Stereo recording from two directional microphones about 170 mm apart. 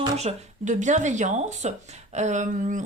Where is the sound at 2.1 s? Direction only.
45° right (ahead or behind).